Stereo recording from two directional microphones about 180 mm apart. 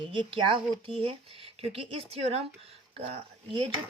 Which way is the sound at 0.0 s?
30° right (ahead or behind).